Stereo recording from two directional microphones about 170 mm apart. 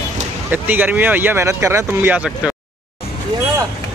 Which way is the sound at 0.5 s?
10° right (ahead or behind).